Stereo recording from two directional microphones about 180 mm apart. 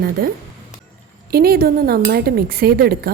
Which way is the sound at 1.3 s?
55° right (ahead or behind).